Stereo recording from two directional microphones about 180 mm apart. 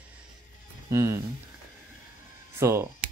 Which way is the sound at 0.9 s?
15° right (ahead or behind).